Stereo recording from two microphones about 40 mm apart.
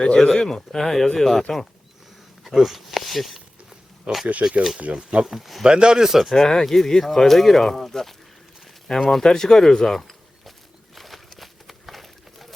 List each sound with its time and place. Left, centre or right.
0.2 s speech: centre
2.4 s speech: centre
4.1 s speech: right
4.4 s speech: right
5.2 s speech: centre
5.6 s speech: right
6.2 s speech: centre
10.9 s a sound: centre